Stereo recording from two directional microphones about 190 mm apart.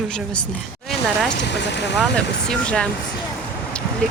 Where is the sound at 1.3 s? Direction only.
65° left (ahead or behind).